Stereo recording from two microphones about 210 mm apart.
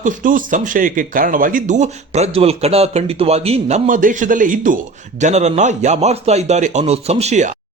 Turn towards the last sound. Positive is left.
turn(degrees=-35)  # may be behind; listen again after turning